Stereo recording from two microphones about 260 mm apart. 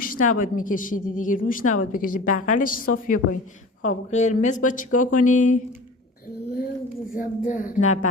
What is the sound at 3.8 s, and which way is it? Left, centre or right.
Speech, left.